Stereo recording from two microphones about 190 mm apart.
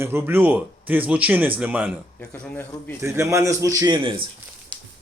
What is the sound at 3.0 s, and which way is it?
Speech, 15° right (ahead or behind).